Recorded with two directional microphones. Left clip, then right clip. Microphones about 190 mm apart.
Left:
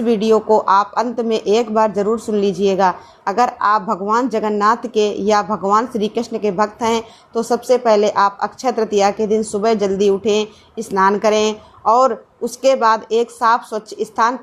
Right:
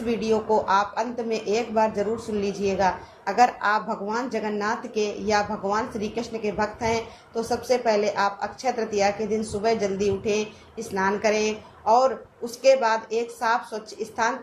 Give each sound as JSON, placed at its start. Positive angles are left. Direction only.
{"t": 0.0, "sound": "speech", "side_deg": 45}